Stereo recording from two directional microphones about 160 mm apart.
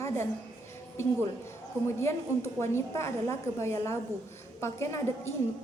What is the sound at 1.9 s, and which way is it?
A woman's voice, 15° left (ahead or behind).